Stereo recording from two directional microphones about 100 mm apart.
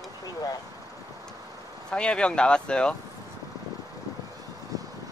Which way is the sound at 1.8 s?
10° left (ahead or behind).